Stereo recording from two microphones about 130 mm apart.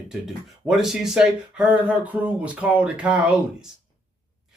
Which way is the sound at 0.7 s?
5° right (ahead or behind).